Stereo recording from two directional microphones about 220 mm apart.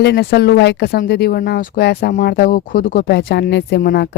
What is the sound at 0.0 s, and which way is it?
Speech, 50° left (ahead or behind).